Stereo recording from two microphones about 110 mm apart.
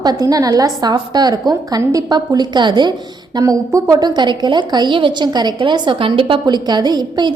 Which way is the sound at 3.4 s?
30° right (ahead or behind).